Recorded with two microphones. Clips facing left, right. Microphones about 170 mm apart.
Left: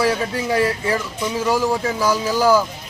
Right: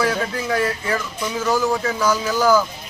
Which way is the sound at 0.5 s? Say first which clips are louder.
Left 3 dB; 25° left (ahead or behind).